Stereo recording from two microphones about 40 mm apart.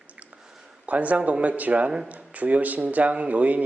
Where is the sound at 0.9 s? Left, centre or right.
Right.